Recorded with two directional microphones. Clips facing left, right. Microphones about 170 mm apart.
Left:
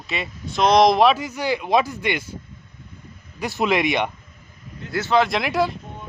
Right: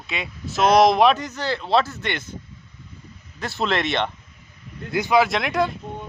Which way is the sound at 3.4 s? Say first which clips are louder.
Left 3 dB; 10° left (ahead or behind).